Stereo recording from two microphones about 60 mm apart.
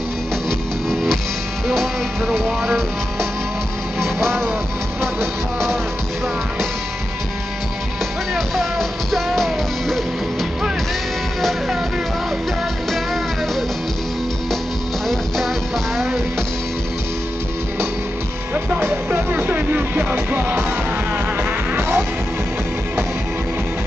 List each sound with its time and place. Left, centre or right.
0.5 s music: centre
8.4 s music: centre
12.9 s music: centre
15.0 s music: centre
18.8 s music: right
21.4 s music: right